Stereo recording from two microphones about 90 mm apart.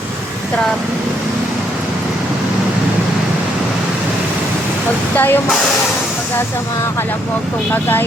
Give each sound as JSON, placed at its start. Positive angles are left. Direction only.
{"t": 5.1, "sound": "speech", "side_deg": 20}
{"t": 7.7, "sound": "speech", "side_deg": 25}